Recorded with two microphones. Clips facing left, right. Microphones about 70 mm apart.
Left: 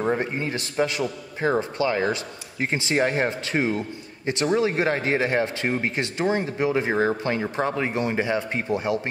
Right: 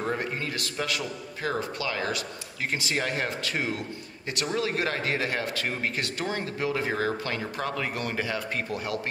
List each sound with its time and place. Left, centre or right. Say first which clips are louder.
0.0 s speech: left 5 dB; left